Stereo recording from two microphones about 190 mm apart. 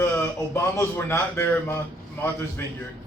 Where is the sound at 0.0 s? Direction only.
15° left (ahead or behind).